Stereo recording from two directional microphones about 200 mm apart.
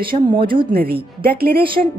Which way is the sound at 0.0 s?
25° right (ahead or behind).